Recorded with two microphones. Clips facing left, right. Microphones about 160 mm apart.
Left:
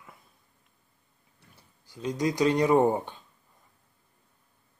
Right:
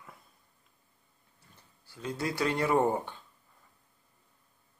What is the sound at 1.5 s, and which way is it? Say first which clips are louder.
Speech: left 4 dB; 15° left (ahead or behind).